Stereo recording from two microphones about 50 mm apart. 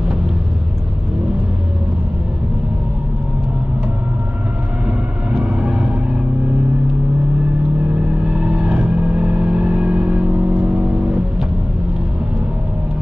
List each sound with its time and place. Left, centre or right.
5.4 s vehicle: centre
8.3 s vehicle: centre